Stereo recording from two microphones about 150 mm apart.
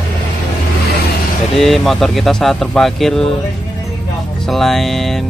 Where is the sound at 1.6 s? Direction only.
Centre (ahead or behind).